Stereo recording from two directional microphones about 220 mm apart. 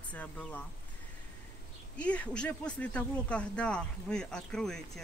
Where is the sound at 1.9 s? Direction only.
5° left (ahead or behind).